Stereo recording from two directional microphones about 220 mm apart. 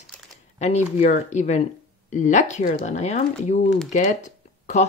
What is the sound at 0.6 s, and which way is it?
Speech, 30° left (ahead or behind).